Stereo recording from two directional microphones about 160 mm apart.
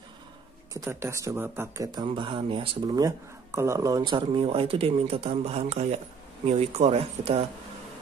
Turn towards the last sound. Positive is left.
turn(degrees=-35)  # may be behind; listen again after turning